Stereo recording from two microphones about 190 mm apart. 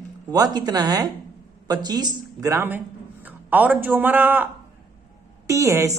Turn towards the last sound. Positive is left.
turn(degrees=-15)  # may be behind; listen again after turning